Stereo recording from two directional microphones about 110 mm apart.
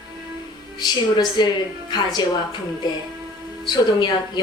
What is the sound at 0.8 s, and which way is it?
Speech, 40° left (ahead or behind).